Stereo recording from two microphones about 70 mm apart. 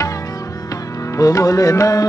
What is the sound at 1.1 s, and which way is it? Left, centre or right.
Music, left.